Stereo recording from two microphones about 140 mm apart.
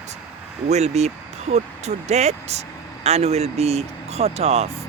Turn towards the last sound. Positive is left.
turn(degrees=-50)  # may be behind; listen again after turning